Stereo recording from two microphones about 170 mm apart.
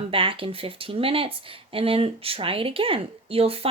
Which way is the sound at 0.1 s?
30° right (ahead or behind).